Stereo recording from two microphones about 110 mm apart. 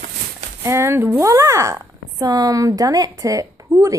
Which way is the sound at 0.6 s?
25° right (ahead or behind).